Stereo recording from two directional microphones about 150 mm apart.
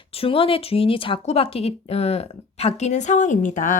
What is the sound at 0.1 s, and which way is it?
Speech, 40° left (ahead or behind).